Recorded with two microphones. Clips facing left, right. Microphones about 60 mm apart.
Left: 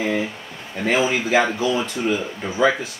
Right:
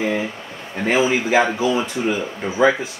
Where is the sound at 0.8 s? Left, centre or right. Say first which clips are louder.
Right 2 dB; right.